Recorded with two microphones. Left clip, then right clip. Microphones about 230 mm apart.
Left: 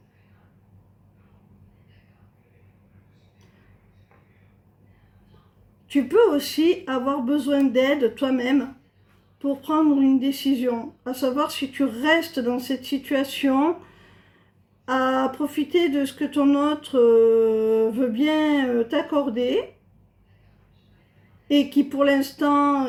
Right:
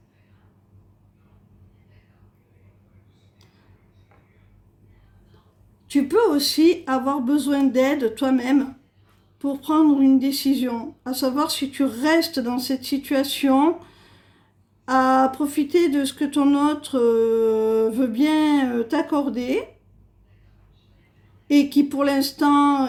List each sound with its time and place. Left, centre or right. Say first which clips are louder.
5.9 s speech: left 1 dB; right
14.8 s speech: right 4 dB; right
21.5 s speech: right 2 dB; right